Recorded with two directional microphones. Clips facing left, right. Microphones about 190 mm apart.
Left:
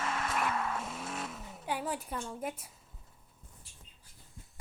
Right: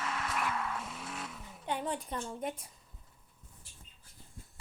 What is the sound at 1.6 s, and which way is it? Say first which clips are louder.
A woman's voice: even; 5° left (ahead or behind).